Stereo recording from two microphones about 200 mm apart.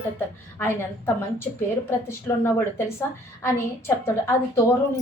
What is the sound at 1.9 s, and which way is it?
A woman's voice, 15° left (ahead or behind).